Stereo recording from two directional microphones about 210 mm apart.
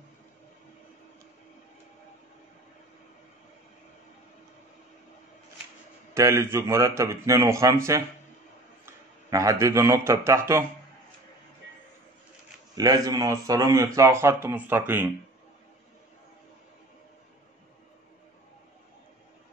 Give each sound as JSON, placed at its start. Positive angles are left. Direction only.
{"t": 6.1, "sound": "a man's voice", "side_deg": -15}
{"t": 12.7, "sound": "a man's voice", "side_deg": -15}